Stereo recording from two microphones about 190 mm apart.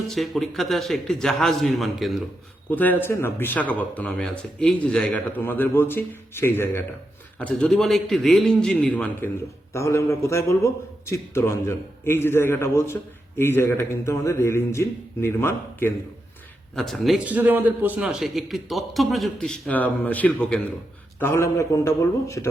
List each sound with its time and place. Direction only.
0.1 s a man's voice: centre (ahead or behind)
16.7 s a man's voice: centre (ahead or behind)